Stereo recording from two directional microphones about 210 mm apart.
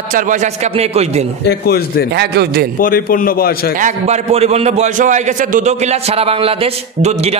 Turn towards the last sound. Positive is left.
turn(degrees=-30)  # may be behind; listen again after turning